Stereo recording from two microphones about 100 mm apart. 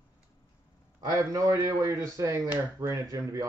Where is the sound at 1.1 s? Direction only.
35° right (ahead or behind).